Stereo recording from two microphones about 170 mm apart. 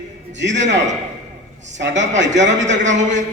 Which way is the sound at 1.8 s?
90° right.